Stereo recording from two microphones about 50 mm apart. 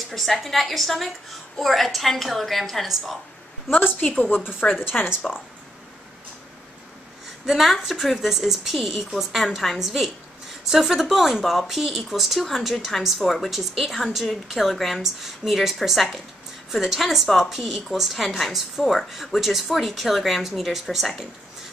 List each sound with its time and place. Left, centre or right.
0.1 s a woman's voice: centre
3.7 s a woman's voice: left
5.2 s speech: centre
7.4 s a woman's voice: centre